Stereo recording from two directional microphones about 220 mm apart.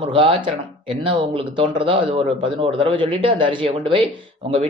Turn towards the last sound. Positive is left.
turn(degrees=-25)  # may be behind; listen again after turning